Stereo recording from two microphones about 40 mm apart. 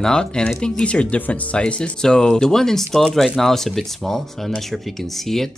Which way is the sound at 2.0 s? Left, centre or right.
Centre.